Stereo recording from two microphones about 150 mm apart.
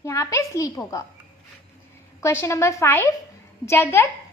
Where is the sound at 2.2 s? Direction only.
15° left (ahead or behind).